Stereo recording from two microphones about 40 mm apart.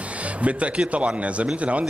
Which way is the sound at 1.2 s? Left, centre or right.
Right.